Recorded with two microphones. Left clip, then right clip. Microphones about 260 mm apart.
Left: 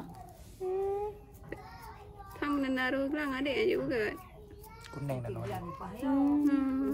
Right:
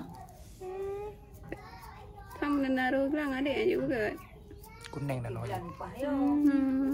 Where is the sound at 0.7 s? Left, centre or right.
Left.